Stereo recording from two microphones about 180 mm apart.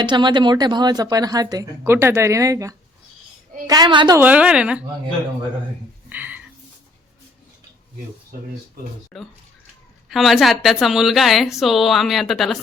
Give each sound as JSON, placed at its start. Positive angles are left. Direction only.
{"t": 0.0, "sound": "speech", "side_deg": -25}
{"t": 4.2, "sound": "a woman's voice", "side_deg": -5}
{"t": 6.1, "sound": "a sound", "side_deg": -10}
{"t": 9.1, "sound": "a woman's voice", "side_deg": 5}